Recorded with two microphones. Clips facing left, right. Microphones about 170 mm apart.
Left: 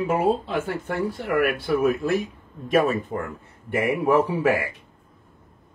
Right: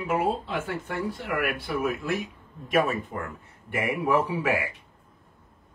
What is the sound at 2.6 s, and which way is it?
A man's voice, 35° left (ahead or behind).